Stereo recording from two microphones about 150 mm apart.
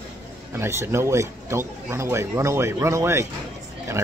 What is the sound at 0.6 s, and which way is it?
Speech, 15° right (ahead or behind).